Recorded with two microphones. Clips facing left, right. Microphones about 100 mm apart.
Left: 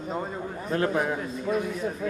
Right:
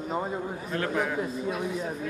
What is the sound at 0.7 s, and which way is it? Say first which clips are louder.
Speech: left 4 dB; 30° left (ahead or behind).